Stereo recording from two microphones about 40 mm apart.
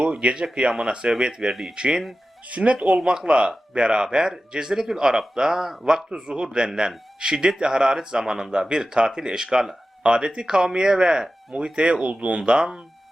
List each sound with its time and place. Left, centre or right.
0.0 s speech: right